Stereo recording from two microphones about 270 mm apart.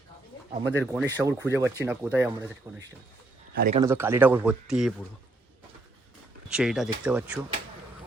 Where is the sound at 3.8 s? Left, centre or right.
Centre.